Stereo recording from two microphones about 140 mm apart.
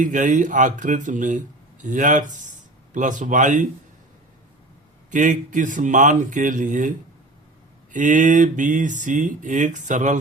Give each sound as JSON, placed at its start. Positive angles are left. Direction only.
{"t": 0.0, "sound": "speech", "side_deg": -65}
{"t": 5.1, "sound": "speech", "side_deg": -65}
{"t": 7.9, "sound": "speech", "side_deg": -65}